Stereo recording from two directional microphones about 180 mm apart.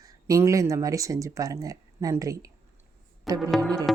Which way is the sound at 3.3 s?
Centre (ahead or behind).